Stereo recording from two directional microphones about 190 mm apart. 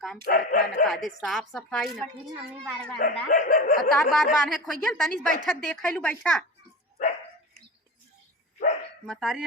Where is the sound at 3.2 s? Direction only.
45° left (ahead or behind).